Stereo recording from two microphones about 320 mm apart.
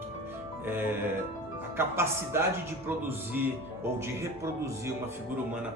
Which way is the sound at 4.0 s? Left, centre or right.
Centre.